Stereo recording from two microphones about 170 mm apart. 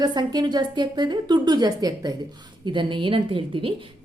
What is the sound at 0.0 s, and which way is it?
A woman's voice, 25° right (ahead or behind).